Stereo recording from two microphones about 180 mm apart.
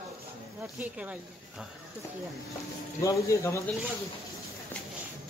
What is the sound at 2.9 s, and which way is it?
Speech, 15° left (ahead or behind).